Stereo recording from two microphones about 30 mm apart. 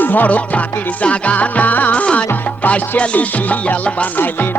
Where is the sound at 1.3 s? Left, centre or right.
Left.